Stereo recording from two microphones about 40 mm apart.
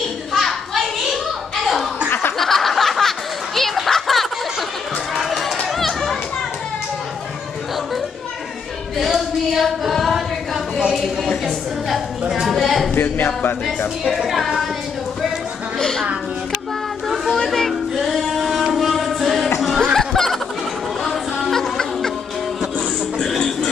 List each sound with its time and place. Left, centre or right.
0.3 s children playing: centre
2.3 s snicker: centre
3.9 s a sound: centre
5.1 s run: centre
5.8 s children playing: centre
8.9 s a sound: centre
11.4 s a sound: centre
13.0 s speech: left
14.0 s music: centre
15.8 s a woman's voice: centre
17.5 s music: centre
20.0 s a sound: centre
21.1 s music: centre